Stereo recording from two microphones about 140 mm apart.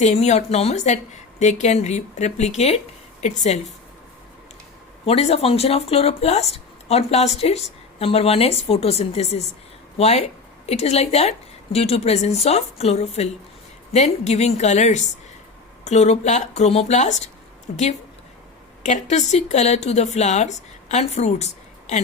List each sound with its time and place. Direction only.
0.0 s a woman's voice: 55° left (ahead or behind)
5.0 s a woman's voice: 45° left (ahead or behind)